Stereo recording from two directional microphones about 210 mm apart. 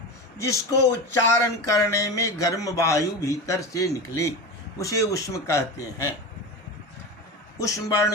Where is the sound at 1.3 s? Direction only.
15° left (ahead or behind).